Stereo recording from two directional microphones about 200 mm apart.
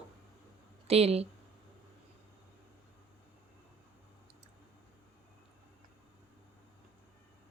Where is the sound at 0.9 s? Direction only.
30° right (ahead or behind).